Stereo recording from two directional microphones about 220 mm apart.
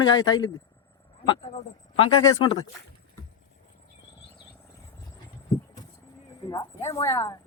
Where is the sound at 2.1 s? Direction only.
70° left (ahead or behind).